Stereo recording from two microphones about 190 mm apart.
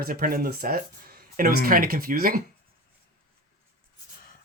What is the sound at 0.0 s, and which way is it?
Speech, 50° right (ahead or behind).